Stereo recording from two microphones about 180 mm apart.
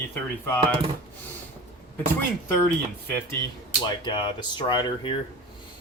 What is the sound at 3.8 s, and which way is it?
Speech, 25° left (ahead or behind).